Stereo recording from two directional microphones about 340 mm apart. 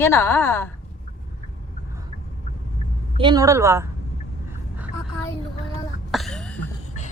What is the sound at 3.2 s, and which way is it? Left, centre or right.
Speech, centre.